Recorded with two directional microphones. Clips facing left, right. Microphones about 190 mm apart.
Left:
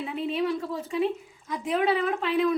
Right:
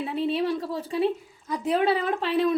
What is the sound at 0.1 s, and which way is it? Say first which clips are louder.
A woman's voice: right 2 dB; 30° right (ahead or behind).